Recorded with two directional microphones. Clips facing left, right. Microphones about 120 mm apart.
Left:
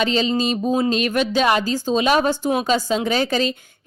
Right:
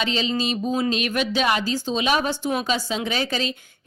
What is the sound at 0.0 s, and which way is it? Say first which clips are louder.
Speech: left 5 dB; 40° left (ahead or behind).